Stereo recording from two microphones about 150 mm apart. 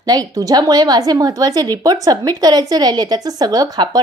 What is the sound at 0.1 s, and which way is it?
A woman's voice, 25° right (ahead or behind).